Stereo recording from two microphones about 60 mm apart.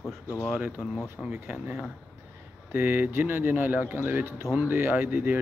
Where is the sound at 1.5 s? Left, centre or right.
Right.